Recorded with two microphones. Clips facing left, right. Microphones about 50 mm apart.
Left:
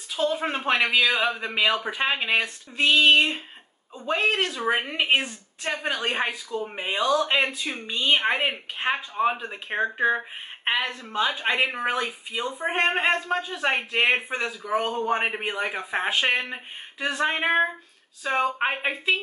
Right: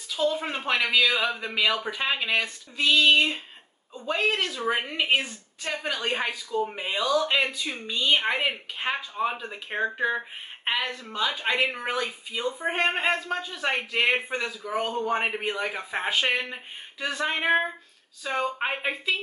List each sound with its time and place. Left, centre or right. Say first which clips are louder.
0.1 s a man's voice: left 1 dB; left
4.6 s a man's voice: left 2 dB; centre
5.6 s speech: left 2 dB; left
6.9 s speech: left 5 dB; left
7.2 s a man's voice: left 1 dB; centre
17.4 s a man's voice: even; centre
18.2 s speech: left 4 dB; left